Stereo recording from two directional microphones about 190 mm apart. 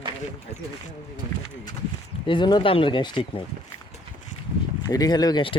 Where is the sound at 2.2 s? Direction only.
25° left (ahead or behind).